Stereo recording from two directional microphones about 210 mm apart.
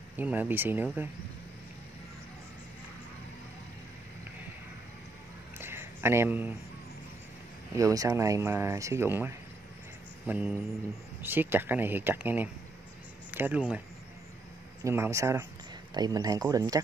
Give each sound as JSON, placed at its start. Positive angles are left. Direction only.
{"t": 0.2, "sound": "speech", "side_deg": -10}
{"t": 5.6, "sound": "a sound", "side_deg": -10}
{"t": 7.7, "sound": "speech", "side_deg": -15}